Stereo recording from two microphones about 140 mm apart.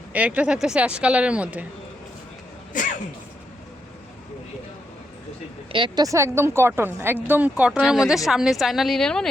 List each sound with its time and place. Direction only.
0.1 s speech: 10° right (ahead or behind)
5.7 s speech: 35° right (ahead or behind)
6.1 s speech: 20° right (ahead or behind); by 9.2 s 5° left (ahead or behind)